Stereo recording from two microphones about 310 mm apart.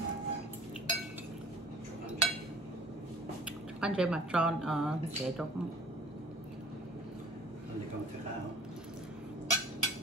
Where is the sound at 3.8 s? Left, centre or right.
Centre.